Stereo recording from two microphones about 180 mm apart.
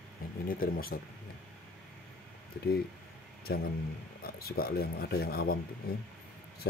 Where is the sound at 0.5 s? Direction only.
55° left (ahead or behind).